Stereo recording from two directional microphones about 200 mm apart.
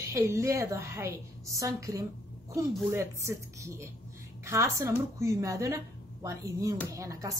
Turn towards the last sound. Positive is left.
turn(degrees=-15)  # may be behind; listen again after turning